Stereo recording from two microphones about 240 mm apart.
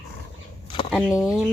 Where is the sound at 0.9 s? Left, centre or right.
Centre.